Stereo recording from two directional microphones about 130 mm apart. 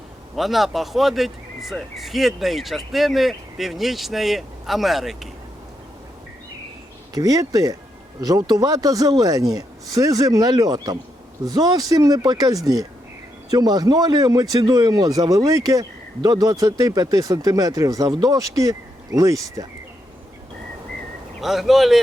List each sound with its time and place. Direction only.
0.3 s speech: centre (ahead or behind)
7.1 s a man's voice: 30° right (ahead or behind)
21.4 s speech: centre (ahead or behind)